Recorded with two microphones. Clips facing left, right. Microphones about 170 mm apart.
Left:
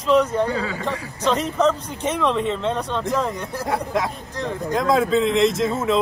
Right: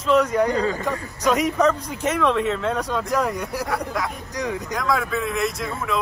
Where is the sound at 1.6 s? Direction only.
5° right (ahead or behind).